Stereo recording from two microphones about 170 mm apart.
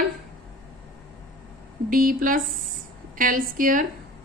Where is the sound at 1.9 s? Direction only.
55° right (ahead or behind).